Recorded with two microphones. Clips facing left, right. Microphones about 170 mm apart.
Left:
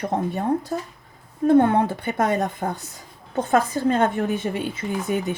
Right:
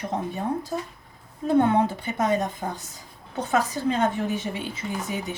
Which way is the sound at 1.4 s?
55° left (ahead or behind).